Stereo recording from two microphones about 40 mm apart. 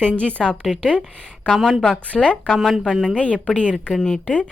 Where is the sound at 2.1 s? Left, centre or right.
Left.